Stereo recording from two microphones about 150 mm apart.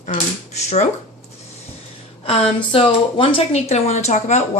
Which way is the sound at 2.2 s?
40° left (ahead or behind).